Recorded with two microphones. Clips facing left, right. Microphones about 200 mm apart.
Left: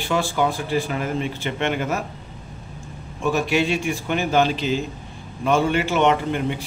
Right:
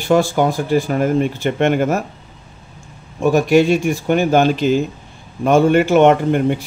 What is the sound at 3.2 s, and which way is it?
Speech, 45° right (ahead or behind).